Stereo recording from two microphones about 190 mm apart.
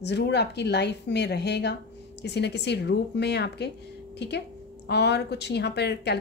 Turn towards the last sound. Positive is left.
turn(degrees=60)  # may be behind; listen again after turning